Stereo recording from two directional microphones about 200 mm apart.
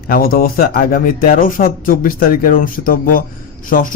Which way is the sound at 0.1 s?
45° left (ahead or behind).